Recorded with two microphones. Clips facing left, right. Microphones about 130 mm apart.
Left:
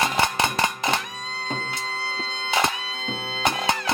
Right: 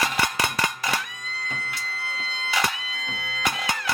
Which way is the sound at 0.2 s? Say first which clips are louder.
Left 3 dB; 25° left (ahead or behind).